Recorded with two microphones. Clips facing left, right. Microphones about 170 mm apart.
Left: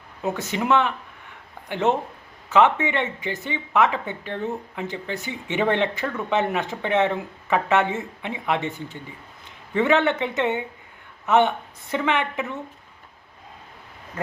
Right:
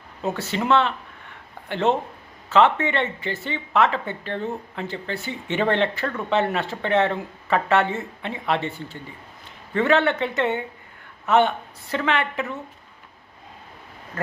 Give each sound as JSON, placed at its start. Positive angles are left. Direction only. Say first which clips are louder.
{"t": 0.2, "sound": "speech", "louder": "even", "side_deg": 15}